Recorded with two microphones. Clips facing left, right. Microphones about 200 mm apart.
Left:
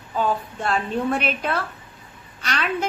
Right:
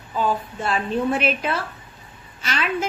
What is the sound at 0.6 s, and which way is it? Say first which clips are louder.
A woman's voice: right 1 dB; centre (ahead or behind).